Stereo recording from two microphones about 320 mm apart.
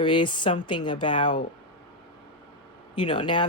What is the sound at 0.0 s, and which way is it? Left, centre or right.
Speech, centre.